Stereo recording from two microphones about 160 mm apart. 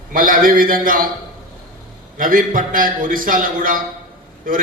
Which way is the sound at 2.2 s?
60° right (ahead or behind).